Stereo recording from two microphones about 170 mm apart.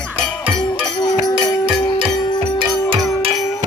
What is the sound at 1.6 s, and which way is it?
Music, 30° right (ahead or behind).